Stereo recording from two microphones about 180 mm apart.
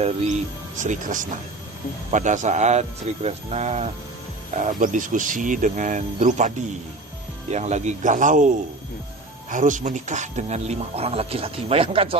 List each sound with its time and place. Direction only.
0.0 s speech: 40° right (ahead or behind)
7.5 s speech: 40° right (ahead or behind)